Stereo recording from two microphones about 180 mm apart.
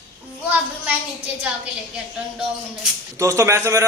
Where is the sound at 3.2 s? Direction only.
15° right (ahead or behind).